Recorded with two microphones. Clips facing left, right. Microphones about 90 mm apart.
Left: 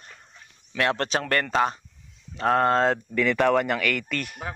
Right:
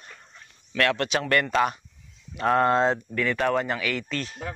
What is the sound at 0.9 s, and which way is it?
Speech, 40° left (ahead or behind).